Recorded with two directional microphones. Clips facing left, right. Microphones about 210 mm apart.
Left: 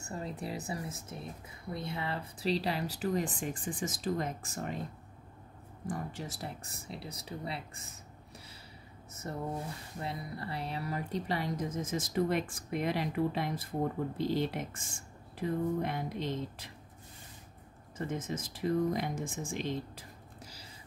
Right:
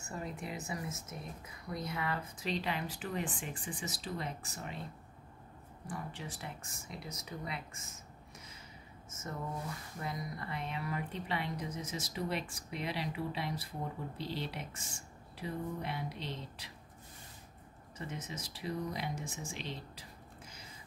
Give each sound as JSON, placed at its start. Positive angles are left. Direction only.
{"t": 0.0, "sound": "speech", "side_deg": 30}
{"t": 5.9, "sound": "speech", "side_deg": 40}
{"t": 9.9, "sound": "speech", "side_deg": 30}
{"t": 17.9, "sound": "speech", "side_deg": 50}